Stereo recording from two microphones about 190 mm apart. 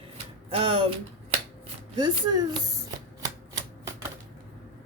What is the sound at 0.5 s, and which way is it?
Speech, 30° right (ahead or behind).